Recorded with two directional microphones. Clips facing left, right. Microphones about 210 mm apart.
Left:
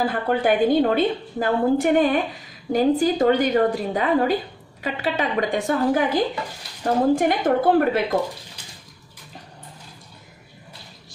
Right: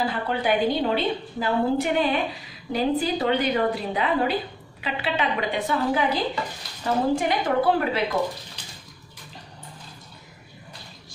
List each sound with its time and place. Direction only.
0.0 s a woman's voice: 50° left (ahead or behind)